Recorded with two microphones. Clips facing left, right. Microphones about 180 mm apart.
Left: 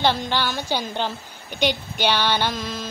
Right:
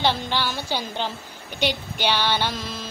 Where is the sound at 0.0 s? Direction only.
Centre (ahead or behind).